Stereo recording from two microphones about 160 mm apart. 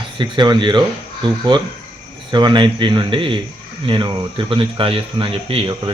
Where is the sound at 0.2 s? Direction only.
25° right (ahead or behind).